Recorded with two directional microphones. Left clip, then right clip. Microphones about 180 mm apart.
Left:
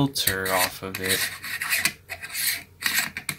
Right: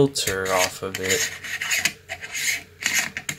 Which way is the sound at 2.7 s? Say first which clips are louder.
Left 1 dB; 15° right (ahead or behind).